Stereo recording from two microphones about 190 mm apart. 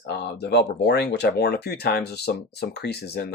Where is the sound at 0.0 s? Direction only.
65° left (ahead or behind).